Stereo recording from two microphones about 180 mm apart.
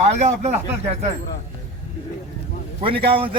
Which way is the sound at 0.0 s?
40° right (ahead or behind).